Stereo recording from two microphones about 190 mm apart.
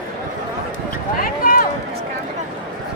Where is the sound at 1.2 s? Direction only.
45° left (ahead or behind).